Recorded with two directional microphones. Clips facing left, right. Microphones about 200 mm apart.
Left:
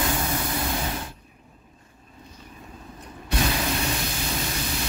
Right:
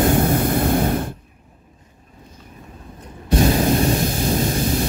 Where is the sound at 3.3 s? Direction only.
40° right (ahead or behind).